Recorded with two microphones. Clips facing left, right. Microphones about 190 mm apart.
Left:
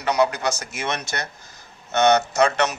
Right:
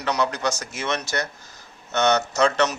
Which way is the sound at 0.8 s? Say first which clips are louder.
Right 2 dB; 55° left (ahead or behind).